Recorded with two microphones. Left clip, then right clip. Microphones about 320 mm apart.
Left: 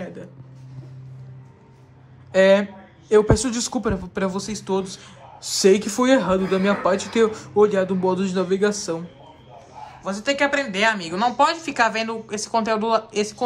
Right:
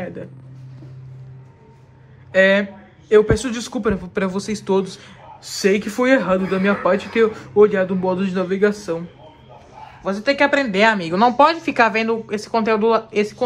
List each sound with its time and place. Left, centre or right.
0.0 s a sound: centre
2.3 s speech: centre
10.0 s speech: centre